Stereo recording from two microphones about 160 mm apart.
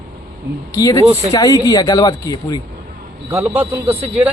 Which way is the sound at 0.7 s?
20° left (ahead or behind).